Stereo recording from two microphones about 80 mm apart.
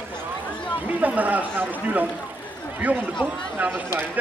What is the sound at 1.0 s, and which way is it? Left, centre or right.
Speech, right.